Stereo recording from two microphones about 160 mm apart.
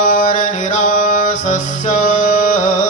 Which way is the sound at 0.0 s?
55° left (ahead or behind).